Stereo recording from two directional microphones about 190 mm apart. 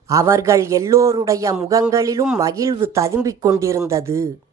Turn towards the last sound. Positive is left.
turn(degrees=-15)  # may be behind; listen again after turning